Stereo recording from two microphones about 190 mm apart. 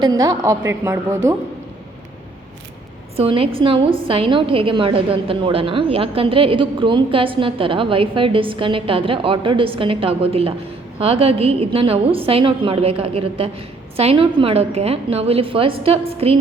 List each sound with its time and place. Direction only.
0.0 s a woman's voice: 20° right (ahead or behind)
3.2 s a woman's voice: 30° right (ahead or behind)